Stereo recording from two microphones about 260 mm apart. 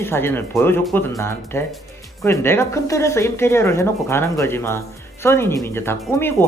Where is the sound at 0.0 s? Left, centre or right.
Centre.